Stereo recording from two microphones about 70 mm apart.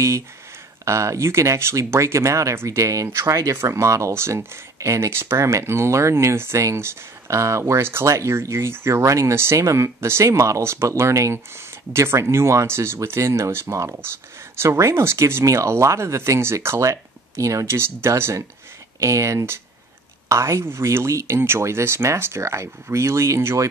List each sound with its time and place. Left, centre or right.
0.8 s speech: right